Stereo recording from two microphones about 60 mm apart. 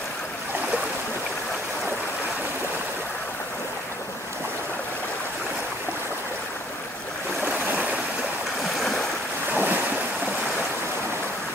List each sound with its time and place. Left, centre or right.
7.4 s stream: right
8.7 s stream: centre
9.5 s waves: right